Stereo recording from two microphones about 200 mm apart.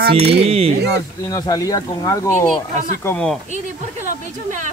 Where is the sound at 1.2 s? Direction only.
15° left (ahead or behind).